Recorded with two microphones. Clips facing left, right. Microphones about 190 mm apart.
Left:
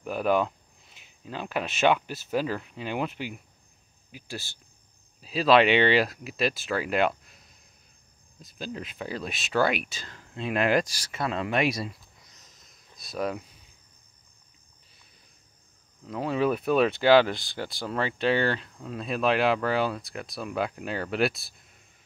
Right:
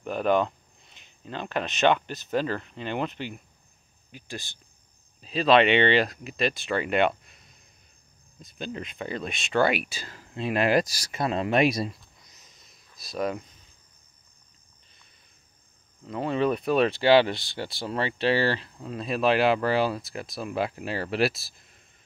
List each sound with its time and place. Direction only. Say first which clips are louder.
0.0 s speech: right 1 dB; 5° left (ahead or behind)
10.7 s speech: right 1 dB; 40° right (ahead or behind)
11.1 s speech: right 3 dB; 20° right (ahead or behind)
12.4 s sniff: even; centre (ahead or behind)
13.0 s speech: right 1 dB; centre (ahead or behind)
16.0 s speech: right 1 dB; centre (ahead or behind)